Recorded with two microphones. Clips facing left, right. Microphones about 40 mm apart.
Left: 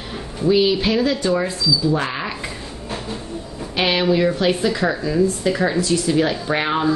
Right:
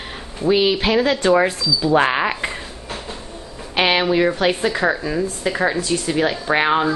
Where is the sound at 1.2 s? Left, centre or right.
Right.